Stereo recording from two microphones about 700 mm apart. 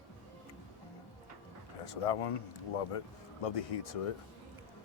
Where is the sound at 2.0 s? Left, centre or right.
Left.